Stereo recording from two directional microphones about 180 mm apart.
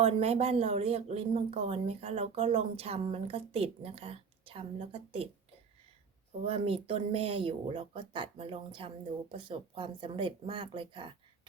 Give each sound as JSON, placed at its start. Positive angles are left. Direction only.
{"t": 0.0, "sound": "speech", "side_deg": -35}
{"t": 6.4, "sound": "speech", "side_deg": -30}